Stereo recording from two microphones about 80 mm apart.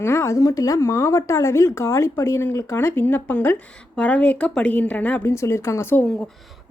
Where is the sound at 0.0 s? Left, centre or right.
Left.